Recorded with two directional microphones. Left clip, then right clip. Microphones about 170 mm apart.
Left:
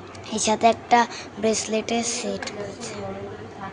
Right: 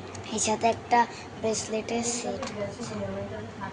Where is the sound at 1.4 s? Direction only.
40° left (ahead or behind).